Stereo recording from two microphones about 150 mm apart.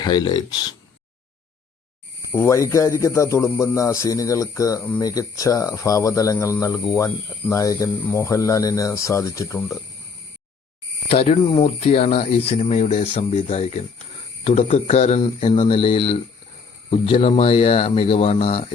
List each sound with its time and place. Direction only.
0.0 s speech: 30° left (ahead or behind)
2.3 s speech: 20° left (ahead or behind)
11.1 s speech: 45° left (ahead or behind)